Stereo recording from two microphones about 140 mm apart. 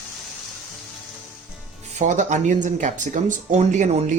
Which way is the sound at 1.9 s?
60° right (ahead or behind).